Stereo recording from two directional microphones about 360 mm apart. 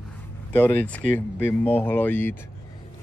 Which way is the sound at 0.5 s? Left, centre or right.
Centre.